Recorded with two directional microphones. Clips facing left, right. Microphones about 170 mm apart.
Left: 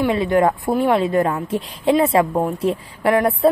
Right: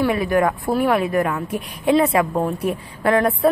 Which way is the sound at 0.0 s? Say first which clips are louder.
Left 2 dB; 25° left (ahead or behind).